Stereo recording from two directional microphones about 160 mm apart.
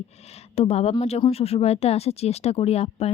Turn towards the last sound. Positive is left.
turn(degrees=40)  # may be behind; listen again after turning